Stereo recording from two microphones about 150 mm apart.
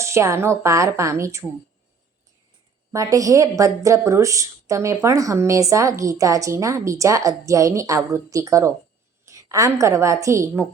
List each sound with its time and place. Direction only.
0.0 s a woman's voice: 20° right (ahead or behind)
2.9 s a woman's voice: 20° right (ahead or behind)